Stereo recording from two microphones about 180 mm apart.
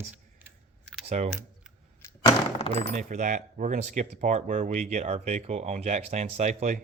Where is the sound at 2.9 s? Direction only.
40° right (ahead or behind).